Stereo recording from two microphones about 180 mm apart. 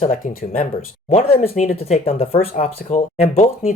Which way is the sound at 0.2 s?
45° left (ahead or behind).